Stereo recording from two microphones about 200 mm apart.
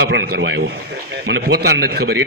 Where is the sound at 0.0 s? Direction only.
55° right (ahead or behind).